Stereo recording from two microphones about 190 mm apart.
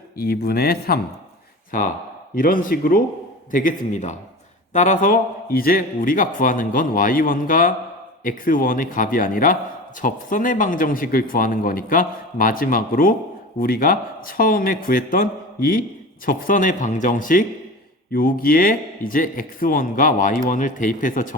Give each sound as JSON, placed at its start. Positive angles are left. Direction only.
{"t": 0.2, "sound": "speech", "side_deg": 55}
{"t": 2.3, "sound": "speech", "side_deg": 50}